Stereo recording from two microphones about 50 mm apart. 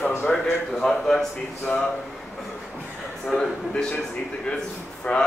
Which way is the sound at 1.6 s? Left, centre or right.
Left.